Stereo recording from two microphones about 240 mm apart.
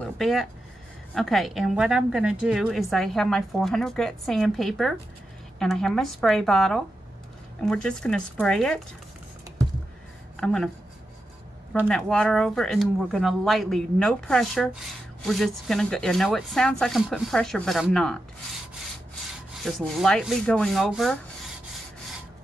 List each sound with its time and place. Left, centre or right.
0.0 s a sound: centre
1.1 s a woman's voice: centre
10.3 s speech: centre
11.7 s a woman's voice: centre
19.5 s a woman's voice: centre